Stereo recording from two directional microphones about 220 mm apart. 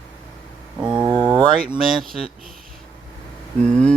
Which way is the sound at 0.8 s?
20° right (ahead or behind).